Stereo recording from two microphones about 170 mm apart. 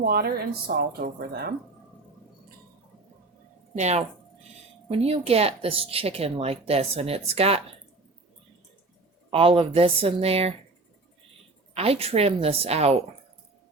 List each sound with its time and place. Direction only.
0.0 s speech: 60° right (ahead or behind)
3.8 s speech: 40° right (ahead or behind)
9.3 s speech: 35° right (ahead or behind)
11.7 s speech: 35° right (ahead or behind)